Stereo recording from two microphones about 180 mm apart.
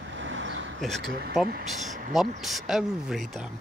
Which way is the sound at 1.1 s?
60° right (ahead or behind).